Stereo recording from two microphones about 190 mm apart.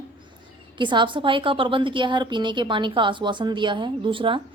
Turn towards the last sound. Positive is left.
turn(degrees=-25)  # may be behind; listen again after turning